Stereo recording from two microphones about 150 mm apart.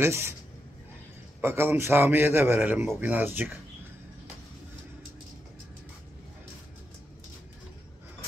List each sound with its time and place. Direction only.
0.0 s a man's voice: 15° right (ahead or behind)
1.4 s a man's voice: 15° right (ahead or behind)